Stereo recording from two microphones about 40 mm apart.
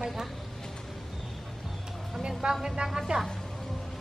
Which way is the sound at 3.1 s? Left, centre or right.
Right.